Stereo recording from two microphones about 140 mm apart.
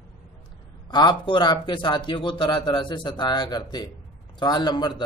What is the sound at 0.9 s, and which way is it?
Speech, 35° left (ahead or behind).